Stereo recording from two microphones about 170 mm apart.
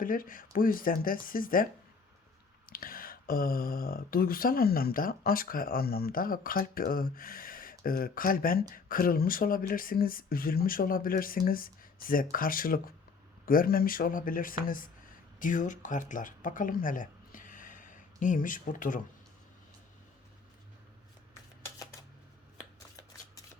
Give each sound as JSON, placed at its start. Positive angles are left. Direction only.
{"t": 0.0, "sound": "speech", "side_deg": 55}
{"t": 2.6, "sound": "speech", "side_deg": 55}